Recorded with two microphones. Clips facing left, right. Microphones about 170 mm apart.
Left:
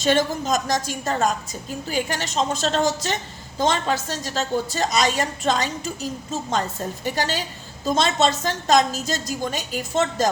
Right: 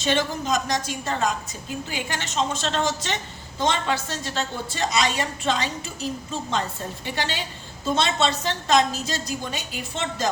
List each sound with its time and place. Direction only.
0.0 s a woman's voice: 40° left (ahead or behind)